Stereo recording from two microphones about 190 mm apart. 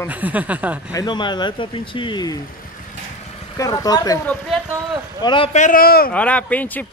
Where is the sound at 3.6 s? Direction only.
20° left (ahead or behind).